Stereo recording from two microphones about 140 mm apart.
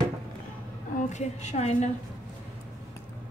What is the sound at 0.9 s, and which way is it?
Speech, 60° left (ahead or behind).